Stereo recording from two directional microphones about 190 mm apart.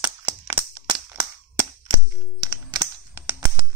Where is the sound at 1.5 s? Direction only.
20° right (ahead or behind).